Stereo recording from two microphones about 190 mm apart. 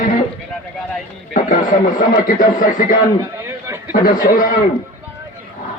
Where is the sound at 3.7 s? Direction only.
15° right (ahead or behind).